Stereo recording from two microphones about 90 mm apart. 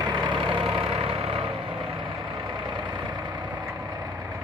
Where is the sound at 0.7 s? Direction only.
90° right.